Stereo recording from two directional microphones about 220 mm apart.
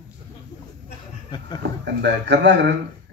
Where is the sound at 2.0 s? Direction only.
50° right (ahead or behind).